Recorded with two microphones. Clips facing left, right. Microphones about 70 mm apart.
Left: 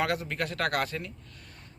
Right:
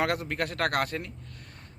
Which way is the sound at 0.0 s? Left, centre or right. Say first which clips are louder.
Right 1 dB; right.